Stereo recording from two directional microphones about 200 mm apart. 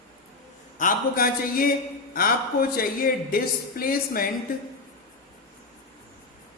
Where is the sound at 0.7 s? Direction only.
45° left (ahead or behind).